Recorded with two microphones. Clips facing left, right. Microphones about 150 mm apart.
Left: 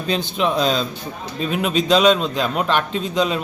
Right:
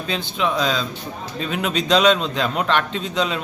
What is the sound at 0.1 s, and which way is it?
Speech, 15° left (ahead or behind).